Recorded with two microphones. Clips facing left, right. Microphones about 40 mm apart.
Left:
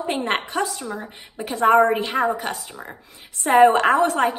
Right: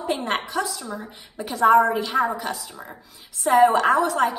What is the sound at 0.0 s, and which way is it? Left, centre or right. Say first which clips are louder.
A woman's voice: left 2 dB; left.